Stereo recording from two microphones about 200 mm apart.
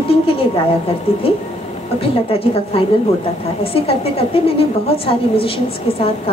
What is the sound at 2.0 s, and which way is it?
A woman's voice, 30° left (ahead or behind).